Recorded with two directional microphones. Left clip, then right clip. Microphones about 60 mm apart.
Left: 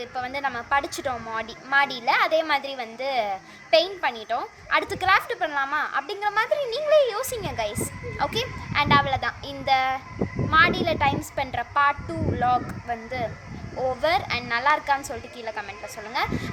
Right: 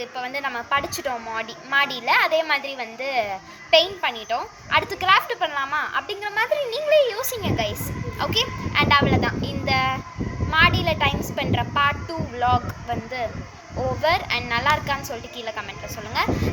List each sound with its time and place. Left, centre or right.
0.0 s a woman's voice: left
14.0 s a child's voice: left